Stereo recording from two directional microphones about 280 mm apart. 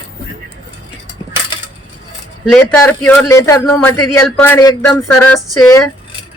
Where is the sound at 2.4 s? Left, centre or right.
Centre.